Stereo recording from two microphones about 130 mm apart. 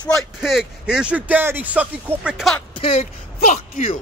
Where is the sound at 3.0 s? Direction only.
85° left.